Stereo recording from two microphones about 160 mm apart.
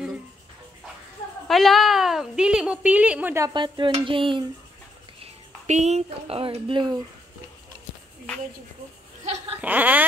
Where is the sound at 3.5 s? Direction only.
30° right (ahead or behind).